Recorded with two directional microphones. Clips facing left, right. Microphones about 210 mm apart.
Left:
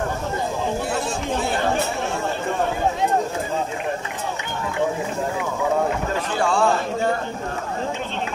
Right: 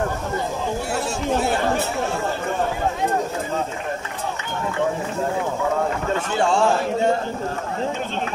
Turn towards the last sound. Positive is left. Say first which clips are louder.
# right 1 dB
turn(degrees=-25)  # may be behind; listen again after turning